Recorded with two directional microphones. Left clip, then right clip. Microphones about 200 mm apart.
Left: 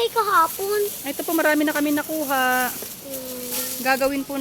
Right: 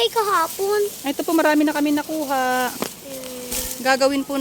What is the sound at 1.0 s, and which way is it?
Speech, 55° right (ahead or behind).